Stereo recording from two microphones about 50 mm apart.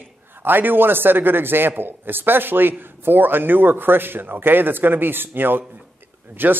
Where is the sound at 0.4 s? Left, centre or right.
Right.